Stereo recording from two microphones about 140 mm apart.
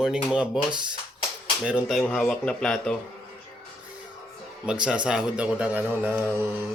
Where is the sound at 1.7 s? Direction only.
5° right (ahead or behind).